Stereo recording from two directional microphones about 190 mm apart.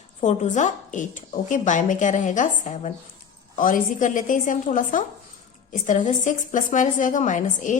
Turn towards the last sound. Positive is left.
turn(degrees=40)  # may be behind; listen again after turning